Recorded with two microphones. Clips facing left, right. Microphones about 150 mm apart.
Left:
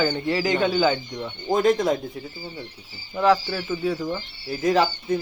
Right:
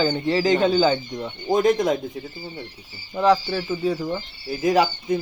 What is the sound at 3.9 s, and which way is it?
Speech, 5° right (ahead or behind).